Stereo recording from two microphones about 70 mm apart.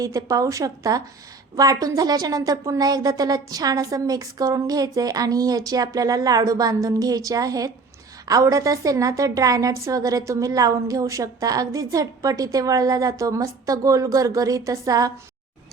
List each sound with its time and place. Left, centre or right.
0.0 s a woman's voice: right